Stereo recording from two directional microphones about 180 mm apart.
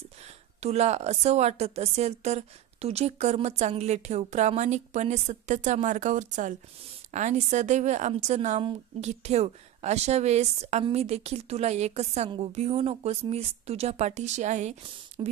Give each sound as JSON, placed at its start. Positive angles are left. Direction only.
{"t": 0.6, "sound": "a woman's voice", "side_deg": -35}
{"t": 15.2, "sound": "music", "side_deg": -25}